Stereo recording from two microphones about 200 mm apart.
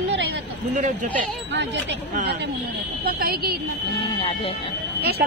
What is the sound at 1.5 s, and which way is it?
Speech, 60° right (ahead or behind).